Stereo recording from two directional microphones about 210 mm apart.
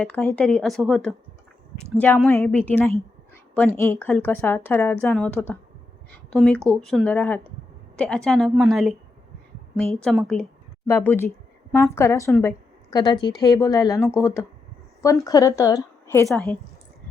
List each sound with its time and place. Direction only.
0.0 s a woman's voice: 5° left (ahead or behind)
12.4 s a sound: 15° left (ahead or behind)
13.2 s a woman's voice: 15° left (ahead or behind)
16.2 s a woman's voice: centre (ahead or behind)